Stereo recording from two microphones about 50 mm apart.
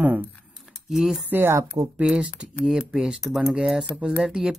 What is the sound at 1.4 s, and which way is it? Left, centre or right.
Speech, right.